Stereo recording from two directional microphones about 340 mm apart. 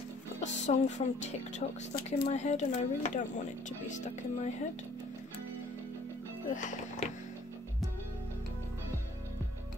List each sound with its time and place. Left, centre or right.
0.4 s music: left
2.0 s a woman's voice: centre
7.0 s a woman's voice: centre